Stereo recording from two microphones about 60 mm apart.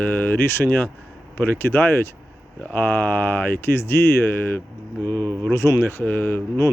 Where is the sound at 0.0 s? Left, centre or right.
Left.